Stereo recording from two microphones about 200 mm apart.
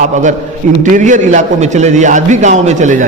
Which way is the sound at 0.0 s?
40° right (ahead or behind).